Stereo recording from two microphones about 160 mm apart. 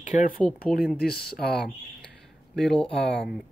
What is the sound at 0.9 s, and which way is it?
Speech, 75° left (ahead or behind).